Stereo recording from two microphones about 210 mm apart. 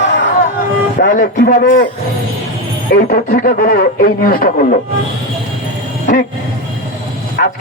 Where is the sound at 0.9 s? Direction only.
45° left (ahead or behind).